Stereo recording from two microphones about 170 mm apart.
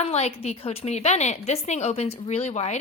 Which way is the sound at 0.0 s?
40° left (ahead or behind).